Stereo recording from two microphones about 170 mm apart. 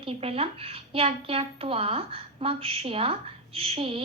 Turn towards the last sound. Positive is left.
turn(degrees=-35)  # may be behind; listen again after turning